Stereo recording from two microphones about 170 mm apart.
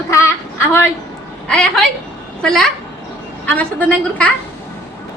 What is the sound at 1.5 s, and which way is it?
A woman's voice, 5° left (ahead or behind).